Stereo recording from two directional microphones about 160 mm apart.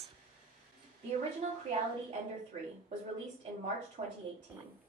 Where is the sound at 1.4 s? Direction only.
45° right (ahead or behind).